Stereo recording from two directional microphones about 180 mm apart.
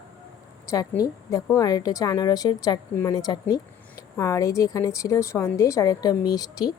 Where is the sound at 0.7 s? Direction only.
20° left (ahead or behind).